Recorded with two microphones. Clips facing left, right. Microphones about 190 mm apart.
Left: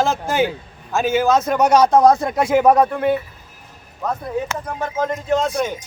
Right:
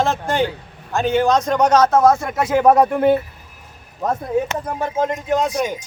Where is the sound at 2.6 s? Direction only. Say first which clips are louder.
Right 2 dB; 5° right (ahead or behind).